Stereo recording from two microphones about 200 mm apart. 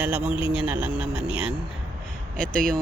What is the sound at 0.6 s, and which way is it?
Speech, 5° right (ahead or behind).